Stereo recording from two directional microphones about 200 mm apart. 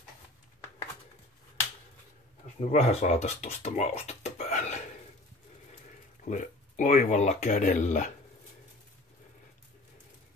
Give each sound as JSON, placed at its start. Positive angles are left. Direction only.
{"t": 2.7, "sound": "speech", "side_deg": 35}
{"t": 6.2, "sound": "speech", "side_deg": 35}